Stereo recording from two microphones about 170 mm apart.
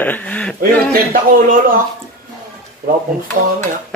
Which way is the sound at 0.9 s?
55° right (ahead or behind).